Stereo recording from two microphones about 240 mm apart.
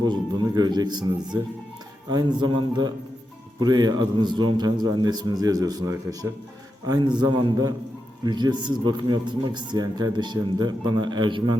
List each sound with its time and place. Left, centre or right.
0.0 s speech: centre